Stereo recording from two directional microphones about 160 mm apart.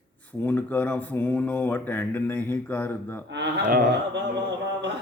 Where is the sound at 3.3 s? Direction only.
90° right.